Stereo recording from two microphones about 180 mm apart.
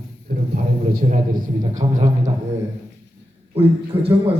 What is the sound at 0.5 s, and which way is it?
A man's voice, 55° right (ahead or behind).